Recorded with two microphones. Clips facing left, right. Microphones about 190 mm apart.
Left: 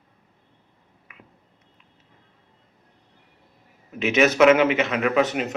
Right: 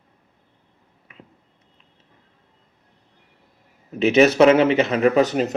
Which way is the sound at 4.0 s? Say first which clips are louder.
Right 3 dB; 35° right (ahead or behind).